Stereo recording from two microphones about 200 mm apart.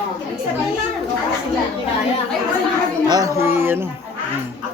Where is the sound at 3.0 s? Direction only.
20° right (ahead or behind).